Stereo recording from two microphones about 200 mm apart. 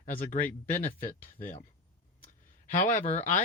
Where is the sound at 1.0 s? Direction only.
40° left (ahead or behind).